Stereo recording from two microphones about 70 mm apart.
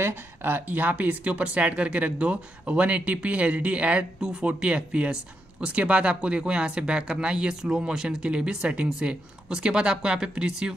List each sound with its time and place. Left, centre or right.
0.0 s speech: right; by 10.7 s centre